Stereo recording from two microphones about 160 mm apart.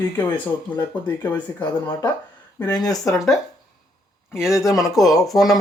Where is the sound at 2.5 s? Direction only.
20° left (ahead or behind).